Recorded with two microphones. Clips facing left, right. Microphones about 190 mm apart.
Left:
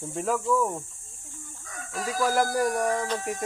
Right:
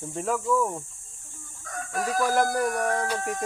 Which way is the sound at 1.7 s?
50° right (ahead or behind).